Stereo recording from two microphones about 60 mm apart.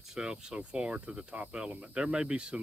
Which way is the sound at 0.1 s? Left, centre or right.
Centre.